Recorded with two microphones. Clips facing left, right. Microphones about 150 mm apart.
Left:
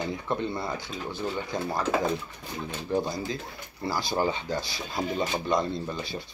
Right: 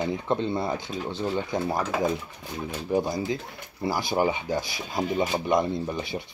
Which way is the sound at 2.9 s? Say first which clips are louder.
Right 3 dB; 15° right (ahead or behind).